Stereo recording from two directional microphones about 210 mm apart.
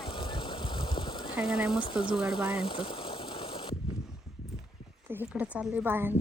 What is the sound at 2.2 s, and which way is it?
Speech, 5° right (ahead or behind).